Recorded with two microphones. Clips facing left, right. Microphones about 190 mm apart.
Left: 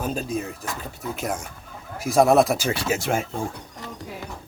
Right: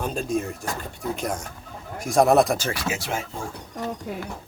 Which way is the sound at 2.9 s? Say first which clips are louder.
Left 5 dB; 50° left (ahead or behind).